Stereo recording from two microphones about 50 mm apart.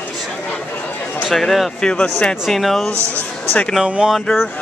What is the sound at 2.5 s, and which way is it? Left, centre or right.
Speech, centre.